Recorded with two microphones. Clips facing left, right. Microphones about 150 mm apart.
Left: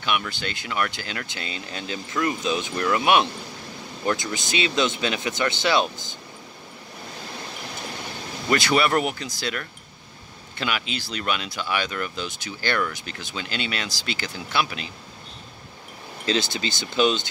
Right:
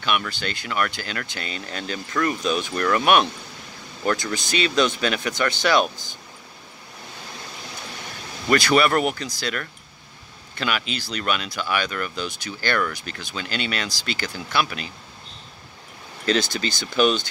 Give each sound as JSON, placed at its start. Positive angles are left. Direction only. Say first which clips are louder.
{"t": 0.0, "sound": "speech", "louder": "right 1 dB", "side_deg": 15}
{"t": 8.5, "sound": "speech", "louder": "right 3 dB", "side_deg": 20}
{"t": 16.5, "sound": "speech", "louder": "right 2 dB", "side_deg": 20}